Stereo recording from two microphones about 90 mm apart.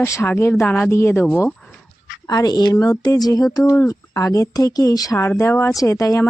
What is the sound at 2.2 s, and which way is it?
Speech, 50° left (ahead or behind).